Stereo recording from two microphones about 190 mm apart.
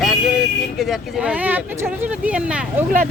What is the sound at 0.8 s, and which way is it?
Speech, centre (ahead or behind).